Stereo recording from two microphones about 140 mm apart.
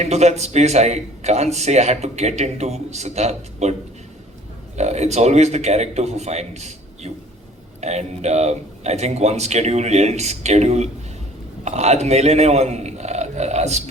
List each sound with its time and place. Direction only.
0.0 s a man's voice: 50° right (ahead or behind)
4.8 s a man's voice: 55° right (ahead or behind)